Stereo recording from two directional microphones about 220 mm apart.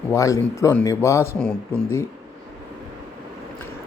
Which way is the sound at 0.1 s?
15° left (ahead or behind).